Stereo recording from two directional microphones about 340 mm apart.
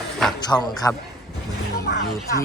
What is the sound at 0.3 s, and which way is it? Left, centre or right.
Speech, centre.